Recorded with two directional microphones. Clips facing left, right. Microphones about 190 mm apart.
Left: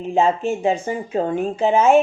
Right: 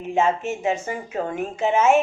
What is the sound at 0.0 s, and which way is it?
A woman's voice, 35° left (ahead or behind).